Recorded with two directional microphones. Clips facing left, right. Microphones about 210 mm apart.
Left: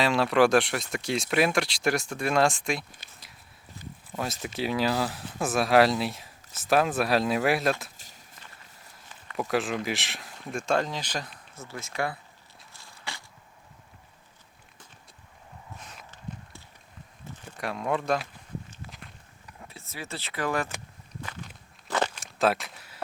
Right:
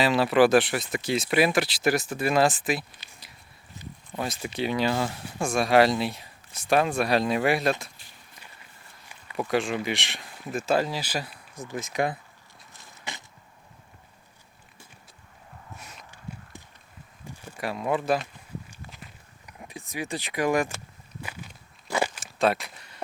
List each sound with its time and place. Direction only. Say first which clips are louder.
0.0 s speech: right 2 dB; centre (ahead or behind)
3.0 s a sound: right 1 dB; 50° left (ahead or behind)
3.8 s a sound: right 1 dB; 20° right (ahead or behind)
4.1 s speech: right 1 dB; centre (ahead or behind)
7.9 s a sound: left 1 dB; 40° left (ahead or behind)
9.0 s speech: right 1 dB; 5° right (ahead or behind)
12.7 s a sound: right 1 dB; 20° right (ahead or behind)
16.1 s walk: even; 15° right (ahead or behind)
17.2 s speech: right 2 dB; 5° right (ahead or behind)
18.9 s walk: even; 5° right (ahead or behind)
19.5 s speech: right 5 dB; 15° right (ahead or behind)
21.8 s walk: right 1 dB; 10° right (ahead or behind)